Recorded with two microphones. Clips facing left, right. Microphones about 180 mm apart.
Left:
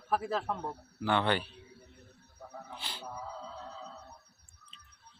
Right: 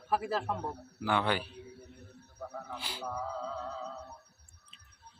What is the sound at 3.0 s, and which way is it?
Music, 55° right (ahead or behind).